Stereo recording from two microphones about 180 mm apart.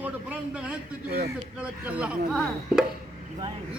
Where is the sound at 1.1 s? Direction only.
55° right (ahead or behind).